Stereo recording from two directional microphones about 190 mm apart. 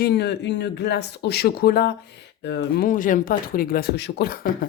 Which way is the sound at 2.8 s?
45° left (ahead or behind).